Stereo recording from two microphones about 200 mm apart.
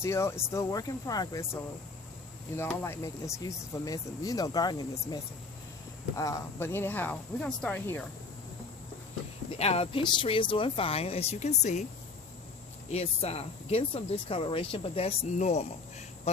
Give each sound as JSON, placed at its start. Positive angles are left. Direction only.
{"t": 0.0, "sound": "speech", "side_deg": 15}
{"t": 9.6, "sound": "speech", "side_deg": 30}
{"t": 12.9, "sound": "speech", "side_deg": 30}